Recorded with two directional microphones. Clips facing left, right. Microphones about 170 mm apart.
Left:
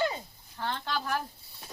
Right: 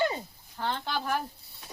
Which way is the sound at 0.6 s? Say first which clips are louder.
Right 1 dB; 15° right (ahead or behind).